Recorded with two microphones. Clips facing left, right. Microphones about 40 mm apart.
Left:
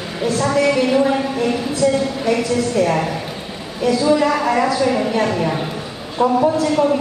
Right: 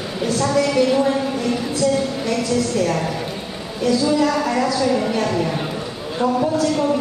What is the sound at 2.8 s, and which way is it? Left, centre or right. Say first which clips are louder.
A woman's voice: left 3 dB; centre.